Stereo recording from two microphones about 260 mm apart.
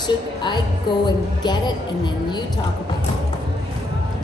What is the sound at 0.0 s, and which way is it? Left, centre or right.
A woman's voice, centre.